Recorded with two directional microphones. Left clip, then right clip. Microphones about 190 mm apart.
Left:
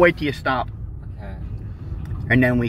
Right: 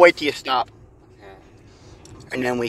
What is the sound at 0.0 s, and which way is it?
Mantra, 25° right (ahead or behind).